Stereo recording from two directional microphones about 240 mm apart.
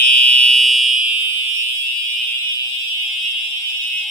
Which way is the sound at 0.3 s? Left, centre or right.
Right.